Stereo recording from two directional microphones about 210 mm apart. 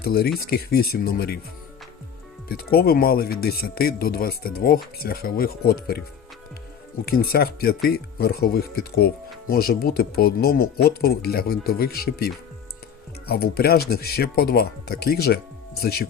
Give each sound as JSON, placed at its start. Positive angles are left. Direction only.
{"t": 0.0, "sound": "speech", "side_deg": 45}
{"t": 2.5, "sound": "speech", "side_deg": 45}
{"t": 7.0, "sound": "speech", "side_deg": 45}